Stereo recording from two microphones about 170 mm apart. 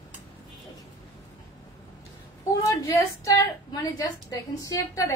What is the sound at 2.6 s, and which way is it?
A woman's voice, 20° left (ahead or behind).